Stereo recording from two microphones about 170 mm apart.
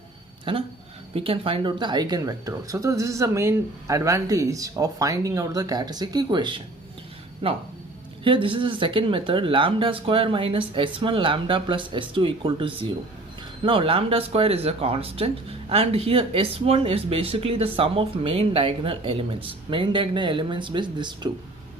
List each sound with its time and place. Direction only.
0.5 s speech: 30° right (ahead or behind)